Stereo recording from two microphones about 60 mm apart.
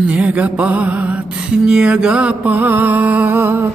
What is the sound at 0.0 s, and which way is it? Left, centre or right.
Music, right.